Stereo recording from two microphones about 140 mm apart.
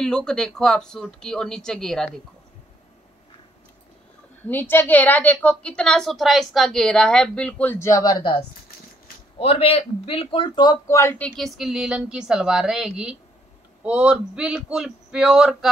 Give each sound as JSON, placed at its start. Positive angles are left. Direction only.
{"t": 0.0, "sound": "speech", "side_deg": 5}
{"t": 4.5, "sound": "a woman's voice", "side_deg": 15}
{"t": 9.4, "sound": "a man's voice", "side_deg": 45}
{"t": 11.0, "sound": "a woman's voice", "side_deg": 20}
{"t": 11.2, "sound": "speech", "side_deg": 0}